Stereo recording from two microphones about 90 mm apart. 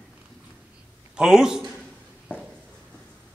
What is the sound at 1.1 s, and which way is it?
Speech, 5° right (ahead or behind).